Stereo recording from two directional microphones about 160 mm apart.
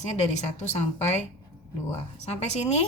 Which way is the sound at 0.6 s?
45° left (ahead or behind).